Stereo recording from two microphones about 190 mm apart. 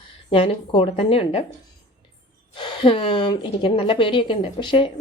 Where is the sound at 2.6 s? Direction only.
25° left (ahead or behind).